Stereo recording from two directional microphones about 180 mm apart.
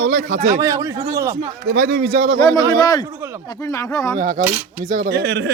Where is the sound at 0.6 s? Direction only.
20° right (ahead or behind).